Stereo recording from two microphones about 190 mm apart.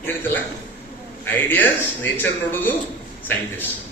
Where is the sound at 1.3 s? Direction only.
10° left (ahead or behind).